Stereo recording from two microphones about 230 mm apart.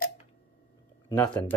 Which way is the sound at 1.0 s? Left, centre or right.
Centre.